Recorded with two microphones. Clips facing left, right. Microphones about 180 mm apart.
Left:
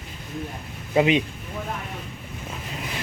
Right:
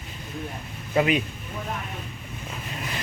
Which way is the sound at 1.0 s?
25° left (ahead or behind).